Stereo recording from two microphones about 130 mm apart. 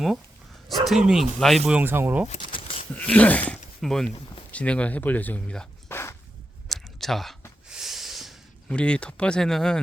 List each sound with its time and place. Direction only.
0.9 s speech: 5° right (ahead or behind)
1.7 s speech: 15° right (ahead or behind)
2.5 s a sound: 45° left (ahead or behind)
2.9 s speech: 10° left (ahead or behind)
6.7 s a sound: centre (ahead or behind)
7.7 s snort: 5° right (ahead or behind)
8.7 s speech: 10° left (ahead or behind)